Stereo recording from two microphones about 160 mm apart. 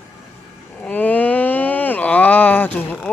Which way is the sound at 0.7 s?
10° left (ahead or behind).